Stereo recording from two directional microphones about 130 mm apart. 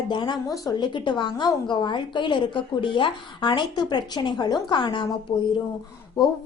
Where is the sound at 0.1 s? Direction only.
35° left (ahead or behind).